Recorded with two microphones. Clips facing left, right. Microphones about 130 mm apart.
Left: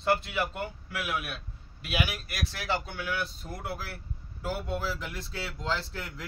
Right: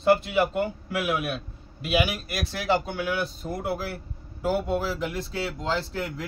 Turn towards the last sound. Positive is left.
turn(degrees=-15)  # may be behind; listen again after turning